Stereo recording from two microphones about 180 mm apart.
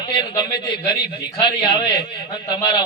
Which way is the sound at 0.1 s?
25° left (ahead or behind).